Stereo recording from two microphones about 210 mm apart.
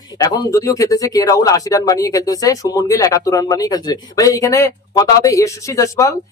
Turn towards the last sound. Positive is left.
turn(degrees=15)  # may be behind; listen again after turning